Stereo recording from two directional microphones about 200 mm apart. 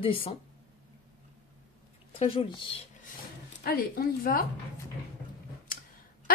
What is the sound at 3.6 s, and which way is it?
Speech, 50° left (ahead or behind).